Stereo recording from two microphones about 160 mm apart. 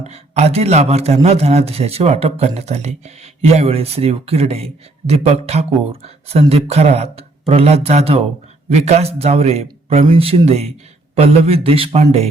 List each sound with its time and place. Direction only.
0.0 s speech: 45° right (ahead or behind)